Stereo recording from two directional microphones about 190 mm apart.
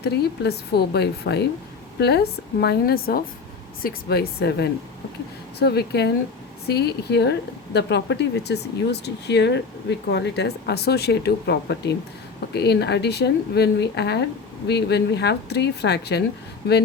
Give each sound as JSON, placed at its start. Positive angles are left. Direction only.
{"t": 0.0, "sound": "speech", "side_deg": 60}